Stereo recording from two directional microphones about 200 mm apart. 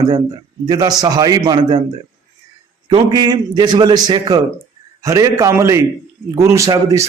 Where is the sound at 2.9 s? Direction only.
20° right (ahead or behind).